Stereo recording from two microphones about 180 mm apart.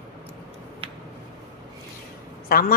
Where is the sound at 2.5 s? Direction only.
55° left (ahead or behind).